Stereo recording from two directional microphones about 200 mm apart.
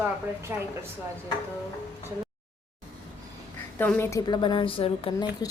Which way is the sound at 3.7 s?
10° left (ahead or behind).